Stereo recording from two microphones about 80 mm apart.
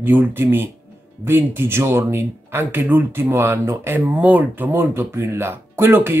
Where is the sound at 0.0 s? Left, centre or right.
Right.